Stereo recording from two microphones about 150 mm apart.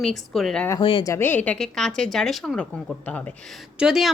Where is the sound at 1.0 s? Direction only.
15° left (ahead or behind).